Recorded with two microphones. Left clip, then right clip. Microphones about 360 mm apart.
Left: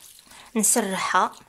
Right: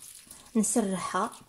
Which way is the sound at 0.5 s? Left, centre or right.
Left.